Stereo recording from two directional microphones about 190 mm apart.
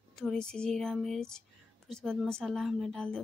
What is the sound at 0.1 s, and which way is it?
Speech, 5° left (ahead or behind).